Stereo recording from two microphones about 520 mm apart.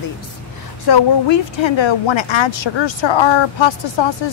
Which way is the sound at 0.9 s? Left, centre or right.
Left.